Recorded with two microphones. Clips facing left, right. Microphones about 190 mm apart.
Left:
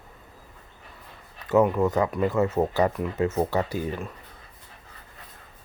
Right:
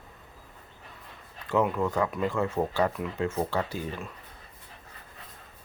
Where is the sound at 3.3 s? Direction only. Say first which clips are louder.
Left 4 dB; 20° left (ahead or behind).